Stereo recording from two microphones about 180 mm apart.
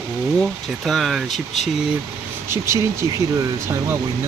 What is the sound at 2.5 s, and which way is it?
Speech, 15° right (ahead or behind).